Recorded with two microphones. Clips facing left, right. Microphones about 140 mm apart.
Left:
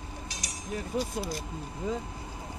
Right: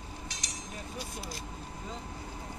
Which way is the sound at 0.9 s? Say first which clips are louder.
Left 13 dB; 90° left.